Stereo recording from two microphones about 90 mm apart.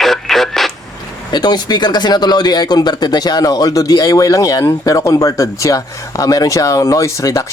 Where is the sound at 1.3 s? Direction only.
50° left (ahead or behind).